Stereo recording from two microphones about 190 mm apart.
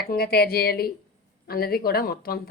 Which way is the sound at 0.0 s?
55° left (ahead or behind).